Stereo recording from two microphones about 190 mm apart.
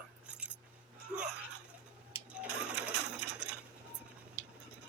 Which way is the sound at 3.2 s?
65° right (ahead or behind).